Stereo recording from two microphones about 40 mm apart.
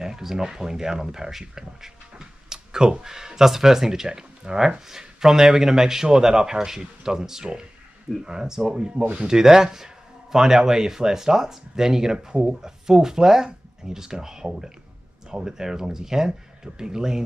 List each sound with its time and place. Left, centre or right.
0.0 s speech: centre
9.0 s speech: right
9.3 s speech: centre